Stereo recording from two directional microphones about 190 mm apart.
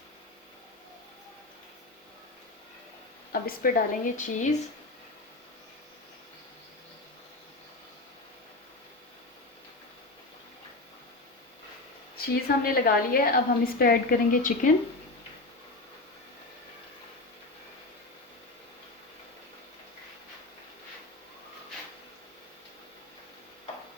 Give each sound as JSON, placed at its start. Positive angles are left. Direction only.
{"t": 3.3, "sound": "a woman's voice", "side_deg": 50}
{"t": 12.2, "sound": "a woman's voice", "side_deg": 50}